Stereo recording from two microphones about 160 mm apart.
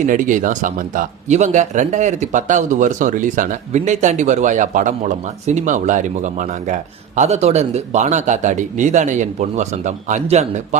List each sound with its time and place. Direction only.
0.0 s speech: 55° right (ahead or behind)